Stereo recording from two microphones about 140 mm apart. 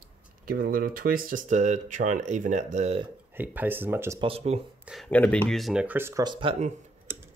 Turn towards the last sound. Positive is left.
turn(degrees=-35)  # may be behind; listen again after turning